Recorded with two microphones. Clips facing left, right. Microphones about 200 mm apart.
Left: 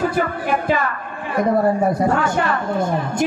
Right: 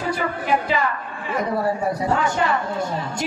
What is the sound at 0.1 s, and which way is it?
A man's voice, 50° left (ahead or behind).